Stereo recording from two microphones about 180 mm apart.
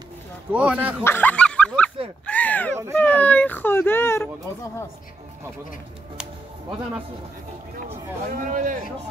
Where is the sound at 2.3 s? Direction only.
10° left (ahead or behind).